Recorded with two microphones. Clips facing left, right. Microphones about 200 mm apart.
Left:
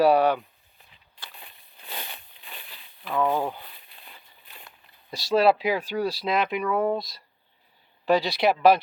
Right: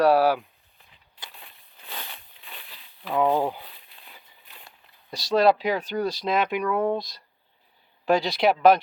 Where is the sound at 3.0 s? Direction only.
15° right (ahead or behind).